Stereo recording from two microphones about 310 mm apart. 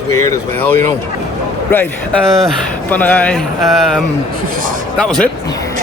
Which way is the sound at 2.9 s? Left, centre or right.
Centre.